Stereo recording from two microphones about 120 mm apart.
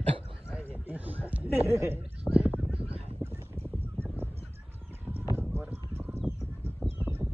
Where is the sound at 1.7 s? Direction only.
20° right (ahead or behind).